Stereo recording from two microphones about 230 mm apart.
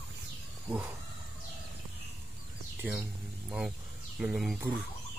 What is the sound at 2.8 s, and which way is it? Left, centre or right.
Speech, centre.